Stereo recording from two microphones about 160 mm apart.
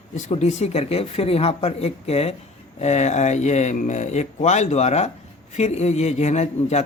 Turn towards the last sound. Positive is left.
turn(degrees=45)  # may be behind; listen again after turning